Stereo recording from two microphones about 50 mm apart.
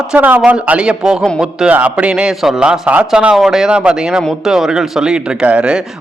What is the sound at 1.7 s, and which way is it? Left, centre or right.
Speech, right.